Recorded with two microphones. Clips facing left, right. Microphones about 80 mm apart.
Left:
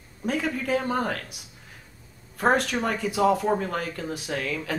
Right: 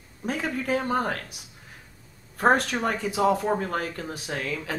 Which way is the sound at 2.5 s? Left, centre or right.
Right.